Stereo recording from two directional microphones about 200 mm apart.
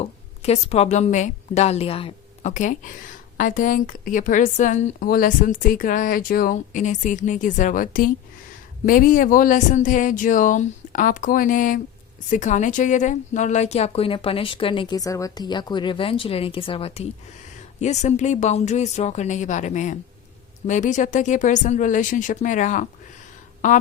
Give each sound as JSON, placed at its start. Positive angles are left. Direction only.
{"t": 0.0, "sound": "a woman's voice", "side_deg": 30}